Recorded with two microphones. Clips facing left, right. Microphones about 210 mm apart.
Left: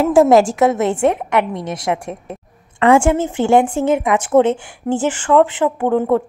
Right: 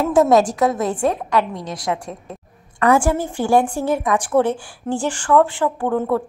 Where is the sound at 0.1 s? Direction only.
25° left (ahead or behind).